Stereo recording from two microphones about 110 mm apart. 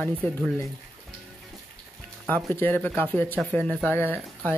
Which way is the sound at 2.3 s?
15° left (ahead or behind).